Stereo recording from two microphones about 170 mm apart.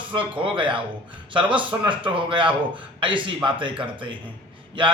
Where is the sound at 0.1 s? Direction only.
30° right (ahead or behind).